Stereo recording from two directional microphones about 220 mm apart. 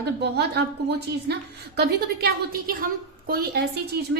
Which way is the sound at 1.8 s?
45° right (ahead or behind).